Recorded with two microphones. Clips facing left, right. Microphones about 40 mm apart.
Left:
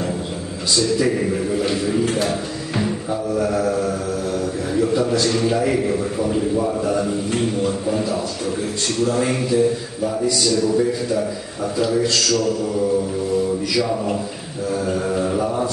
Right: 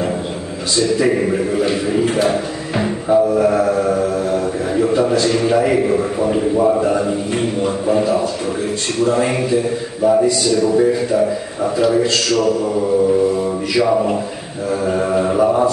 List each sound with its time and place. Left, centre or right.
0.7 s a man's voice: right